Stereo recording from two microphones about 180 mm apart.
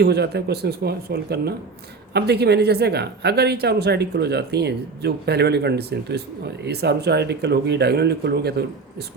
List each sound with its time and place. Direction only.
0.0 s speech: 65° right (ahead or behind)